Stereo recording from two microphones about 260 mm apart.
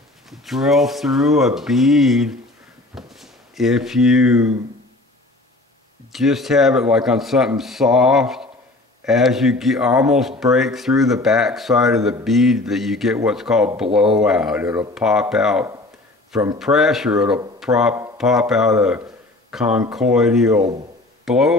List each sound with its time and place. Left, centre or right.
0.3 s speech: centre
6.1 s speech: centre